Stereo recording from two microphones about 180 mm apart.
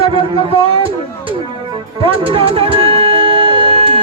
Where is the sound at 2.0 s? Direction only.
30° right (ahead or behind).